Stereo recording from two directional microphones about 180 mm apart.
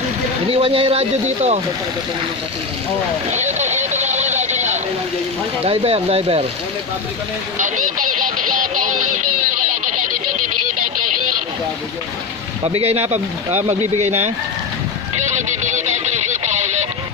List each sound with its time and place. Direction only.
0.5 s speech: 30° right (ahead or behind)
3.3 s a sound: 40° right (ahead or behind)
5.7 s speech: 30° right (ahead or behind)
7.5 s speech: 45° right (ahead or behind)
12.6 s speech: 35° right (ahead or behind)